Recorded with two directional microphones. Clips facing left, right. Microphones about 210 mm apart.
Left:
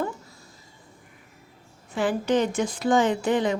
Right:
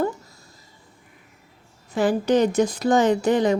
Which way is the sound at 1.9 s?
40° right (ahead or behind).